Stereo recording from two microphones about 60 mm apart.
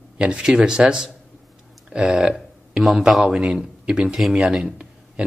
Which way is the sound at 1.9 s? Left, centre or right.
Centre.